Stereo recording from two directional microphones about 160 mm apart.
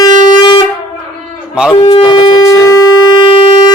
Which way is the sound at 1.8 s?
35° left (ahead or behind).